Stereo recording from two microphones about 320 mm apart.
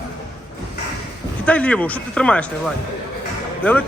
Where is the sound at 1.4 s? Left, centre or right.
Centre.